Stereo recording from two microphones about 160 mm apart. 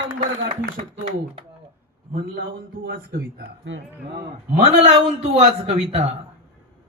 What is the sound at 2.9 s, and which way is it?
Speech, 80° right.